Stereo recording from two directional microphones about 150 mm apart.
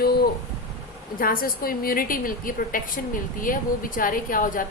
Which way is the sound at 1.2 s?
75° left (ahead or behind).